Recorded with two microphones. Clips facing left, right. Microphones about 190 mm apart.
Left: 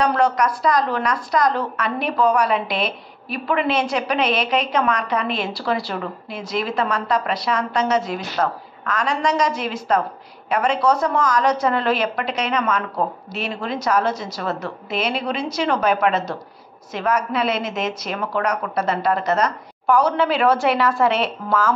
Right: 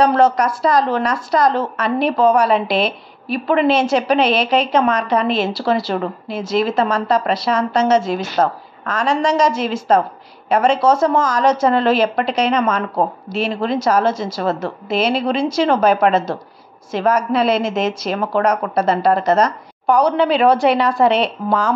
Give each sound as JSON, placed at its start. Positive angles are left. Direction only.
{"t": 0.0, "sound": "a woman's voice", "side_deg": -30}
{"t": 19.9, "sound": "speech", "side_deg": -15}